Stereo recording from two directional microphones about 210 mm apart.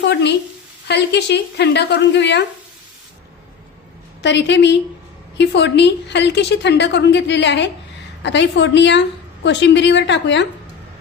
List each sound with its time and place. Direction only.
0.0 s a sound: 55° left (ahead or behind)
0.9 s a woman's voice: 55° left (ahead or behind)
4.2 s a woman's voice: 55° left (ahead or behind)